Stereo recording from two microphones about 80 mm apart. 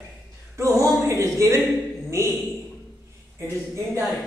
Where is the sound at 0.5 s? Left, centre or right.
Right.